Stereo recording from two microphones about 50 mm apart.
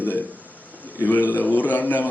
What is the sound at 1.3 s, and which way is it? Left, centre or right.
Speech, left.